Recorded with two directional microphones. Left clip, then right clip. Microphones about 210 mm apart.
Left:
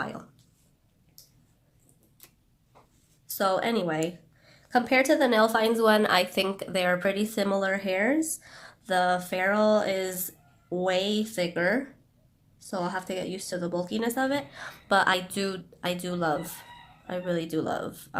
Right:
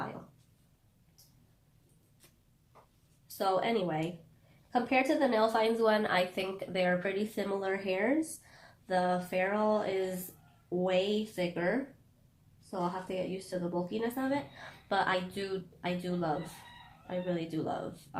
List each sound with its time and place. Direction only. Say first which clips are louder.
3.3 s a woman's voice: left 4 dB; 30° left (ahead or behind)